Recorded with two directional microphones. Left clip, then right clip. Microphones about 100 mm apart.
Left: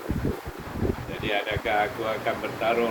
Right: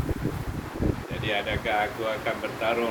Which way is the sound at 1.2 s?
30° right (ahead or behind).